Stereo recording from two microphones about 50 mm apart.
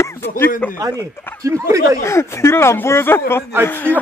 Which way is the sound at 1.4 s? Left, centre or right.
Right.